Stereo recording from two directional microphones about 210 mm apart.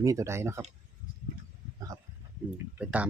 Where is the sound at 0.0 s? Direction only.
15° right (ahead or behind).